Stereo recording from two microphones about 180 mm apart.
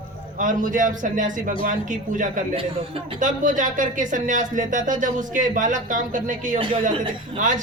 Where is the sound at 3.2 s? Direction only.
45° right (ahead or behind).